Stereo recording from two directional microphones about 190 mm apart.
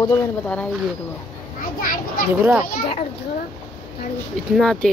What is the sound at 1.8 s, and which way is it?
Speech, 45° left (ahead or behind).